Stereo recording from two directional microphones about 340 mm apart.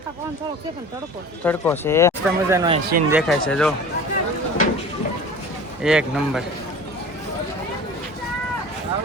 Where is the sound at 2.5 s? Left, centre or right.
Centre.